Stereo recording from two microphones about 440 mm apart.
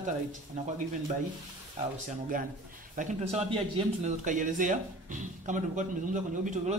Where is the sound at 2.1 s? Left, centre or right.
Centre.